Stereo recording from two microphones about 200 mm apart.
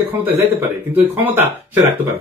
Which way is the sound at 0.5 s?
10° right (ahead or behind).